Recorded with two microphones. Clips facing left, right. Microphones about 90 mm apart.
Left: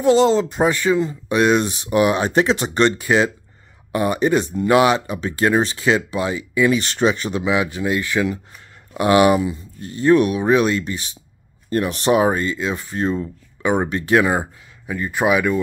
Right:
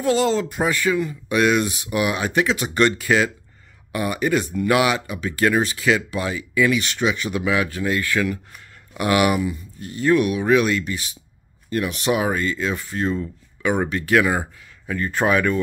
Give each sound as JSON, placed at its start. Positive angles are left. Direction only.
{"t": 0.0, "sound": "speech", "side_deg": 25}
{"t": 7.4, "sound": "speech", "side_deg": 20}
{"t": 15.0, "sound": "speech", "side_deg": 10}